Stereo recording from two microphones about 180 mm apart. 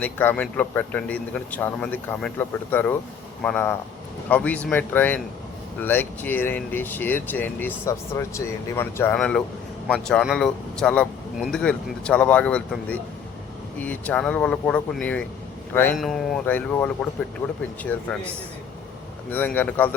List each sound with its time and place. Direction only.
0.0 s a man's voice: 10° left (ahead or behind)
16.0 s a man's voice: centre (ahead or behind)
19.3 s a man's voice: 10° left (ahead or behind)